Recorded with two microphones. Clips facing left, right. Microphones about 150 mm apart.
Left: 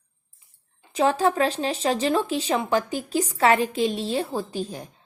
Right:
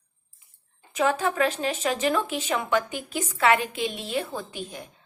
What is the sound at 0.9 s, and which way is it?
Speech, 35° left (ahead or behind).